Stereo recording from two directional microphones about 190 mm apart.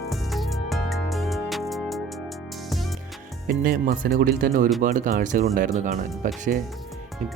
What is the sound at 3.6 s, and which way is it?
Speech, 50° right (ahead or behind).